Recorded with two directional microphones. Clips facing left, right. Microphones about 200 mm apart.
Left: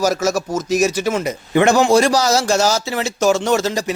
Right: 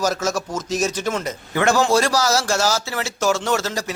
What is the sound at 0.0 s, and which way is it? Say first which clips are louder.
A man's voice: left 4 dB; 10° left (ahead or behind).